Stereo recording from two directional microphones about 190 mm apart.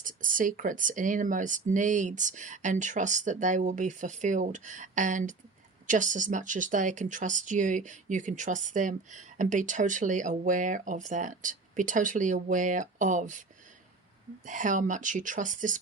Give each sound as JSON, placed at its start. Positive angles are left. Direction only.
{"t": 0.0, "sound": "speech", "side_deg": -45}
{"t": 14.4, "sound": "speech", "side_deg": -40}